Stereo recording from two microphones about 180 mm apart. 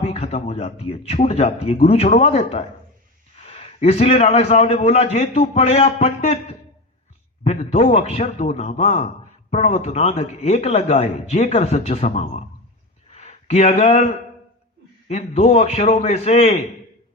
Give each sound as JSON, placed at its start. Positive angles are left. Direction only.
{"t": 0.0, "sound": "a man's voice", "side_deg": 35}